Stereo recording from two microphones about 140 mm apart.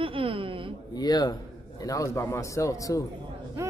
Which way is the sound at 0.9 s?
30° left (ahead or behind).